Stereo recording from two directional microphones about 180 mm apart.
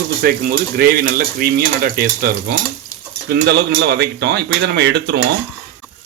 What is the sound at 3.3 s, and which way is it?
Speech, 65° right (ahead or behind).